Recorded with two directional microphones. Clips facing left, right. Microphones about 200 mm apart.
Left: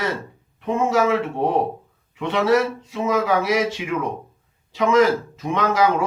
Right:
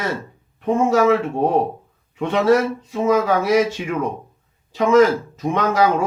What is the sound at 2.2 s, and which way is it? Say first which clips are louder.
Speech: right 2 dB; 45° right (ahead or behind).